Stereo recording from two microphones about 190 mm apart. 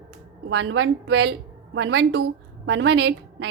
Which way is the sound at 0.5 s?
75° right (ahead or behind).